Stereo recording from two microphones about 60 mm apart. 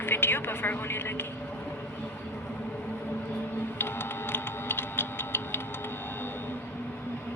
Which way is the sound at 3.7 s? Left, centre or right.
Left.